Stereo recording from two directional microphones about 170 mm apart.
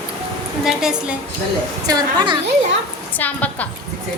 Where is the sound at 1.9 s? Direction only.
25° right (ahead or behind).